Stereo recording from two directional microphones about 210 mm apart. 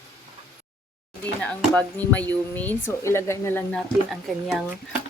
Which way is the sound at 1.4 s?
5° left (ahead or behind).